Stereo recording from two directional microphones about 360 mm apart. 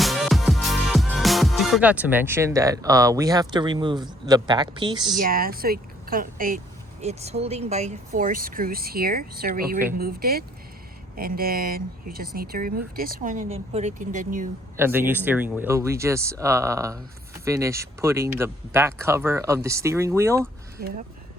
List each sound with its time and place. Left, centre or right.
0.0 s speech: centre
5.2 s speech: right
14.8 s speech: centre